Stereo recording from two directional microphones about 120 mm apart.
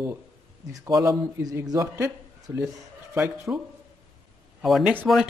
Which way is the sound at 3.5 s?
15° right (ahead or behind).